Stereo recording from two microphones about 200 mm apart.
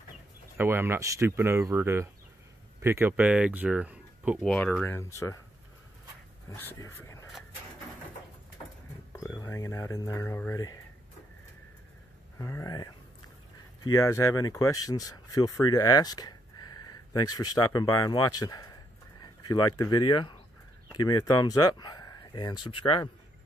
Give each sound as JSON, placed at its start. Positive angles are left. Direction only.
{"t": 0.6, "sound": "speech", "side_deg": -10}
{"t": 4.9, "sound": "speech", "side_deg": 15}
{"t": 6.5, "sound": "speech", "side_deg": 10}
{"t": 9.1, "sound": "speech", "side_deg": 15}
{"t": 12.4, "sound": "speech", "side_deg": 15}
{"t": 13.9, "sound": "speech", "side_deg": 15}